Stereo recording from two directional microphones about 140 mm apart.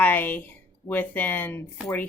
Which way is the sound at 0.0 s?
15° left (ahead or behind).